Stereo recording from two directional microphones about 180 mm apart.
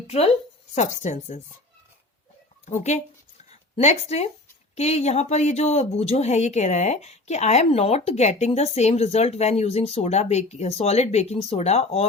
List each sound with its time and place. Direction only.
0.8 s speech: 40° left (ahead or behind)
2.6 s speech: 40° left (ahead or behind)